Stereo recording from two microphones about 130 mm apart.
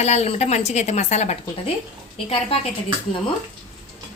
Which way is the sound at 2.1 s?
45° left (ahead or behind).